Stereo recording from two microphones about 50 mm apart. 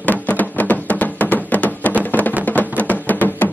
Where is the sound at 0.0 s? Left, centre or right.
Left.